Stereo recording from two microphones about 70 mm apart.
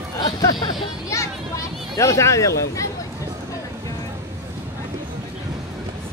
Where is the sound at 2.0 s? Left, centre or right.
Left.